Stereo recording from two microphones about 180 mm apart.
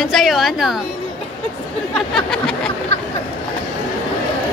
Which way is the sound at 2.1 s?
5° left (ahead or behind).